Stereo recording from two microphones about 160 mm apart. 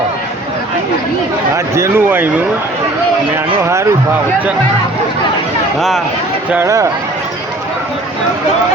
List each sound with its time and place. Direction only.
1.5 s speech: 15° right (ahead or behind)
3.3 s speech: 15° right (ahead or behind)
6.5 s speech: 15° right (ahead or behind)